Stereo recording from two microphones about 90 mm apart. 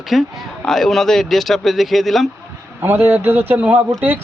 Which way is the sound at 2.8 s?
25° right (ahead or behind).